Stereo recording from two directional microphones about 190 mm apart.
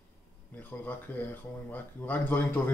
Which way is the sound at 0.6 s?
10° left (ahead or behind).